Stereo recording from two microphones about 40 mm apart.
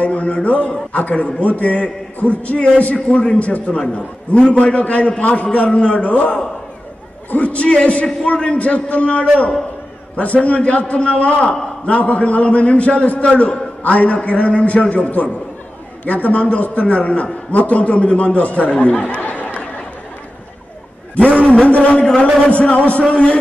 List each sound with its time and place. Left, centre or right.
0.0 s a man's voice: left
21.2 s a man's voice: left